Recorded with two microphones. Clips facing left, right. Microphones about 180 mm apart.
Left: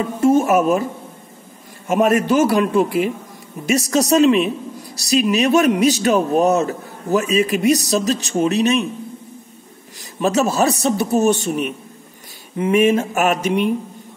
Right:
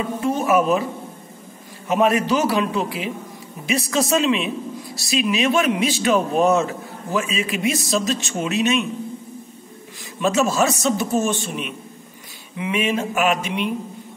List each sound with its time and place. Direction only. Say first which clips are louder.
0.2 s a man's voice: left 5 dB; 45° left (ahead or behind)
1.9 s a man's voice: left 3 dB; 45° left (ahead or behind)
10.2 s a man's voice: left 2 dB; 35° left (ahead or behind)